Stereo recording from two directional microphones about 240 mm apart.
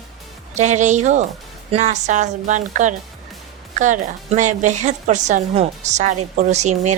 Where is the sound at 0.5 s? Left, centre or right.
Right.